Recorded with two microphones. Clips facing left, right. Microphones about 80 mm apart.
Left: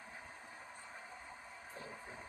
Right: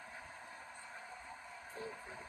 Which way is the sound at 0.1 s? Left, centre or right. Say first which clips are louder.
Right 1 dB; left.